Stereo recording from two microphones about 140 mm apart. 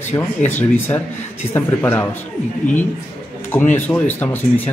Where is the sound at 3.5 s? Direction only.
15° left (ahead or behind).